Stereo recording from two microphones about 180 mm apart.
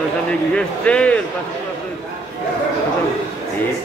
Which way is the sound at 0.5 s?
5° left (ahead or behind).